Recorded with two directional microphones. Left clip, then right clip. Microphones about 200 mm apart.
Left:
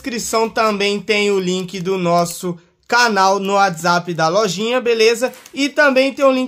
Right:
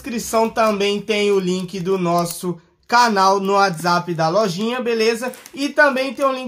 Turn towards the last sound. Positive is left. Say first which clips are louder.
# left 6 dB
turn(degrees=45)  # may be behind; listen again after turning